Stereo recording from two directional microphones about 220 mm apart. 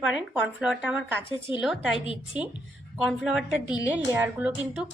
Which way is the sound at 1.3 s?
20° left (ahead or behind).